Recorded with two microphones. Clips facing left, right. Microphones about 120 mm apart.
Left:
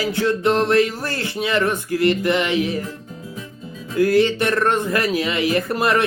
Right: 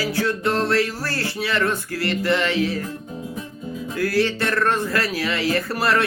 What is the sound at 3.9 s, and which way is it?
Speech, 20° left (ahead or behind).